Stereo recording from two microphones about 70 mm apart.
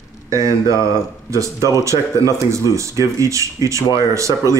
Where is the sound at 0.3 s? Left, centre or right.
Right.